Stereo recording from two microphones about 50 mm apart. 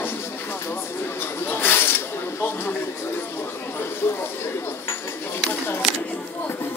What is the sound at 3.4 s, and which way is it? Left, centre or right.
Chatter, left.